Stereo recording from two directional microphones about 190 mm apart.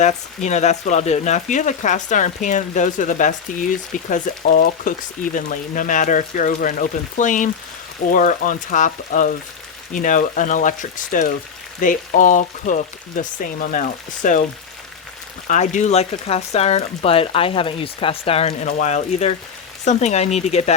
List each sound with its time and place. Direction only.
0.0 s speech: 40° left (ahead or behind)
15.4 s speech: 40° left (ahead or behind)